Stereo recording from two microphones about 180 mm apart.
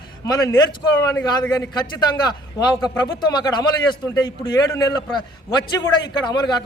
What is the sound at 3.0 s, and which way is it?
A man's voice, 25° left (ahead or behind).